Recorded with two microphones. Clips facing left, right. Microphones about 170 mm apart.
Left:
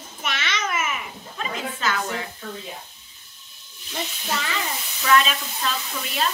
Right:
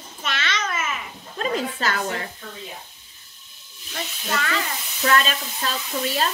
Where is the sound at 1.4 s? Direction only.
40° right (ahead or behind).